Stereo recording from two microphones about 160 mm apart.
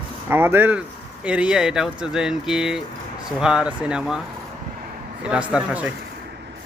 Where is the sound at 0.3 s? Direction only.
15° right (ahead or behind).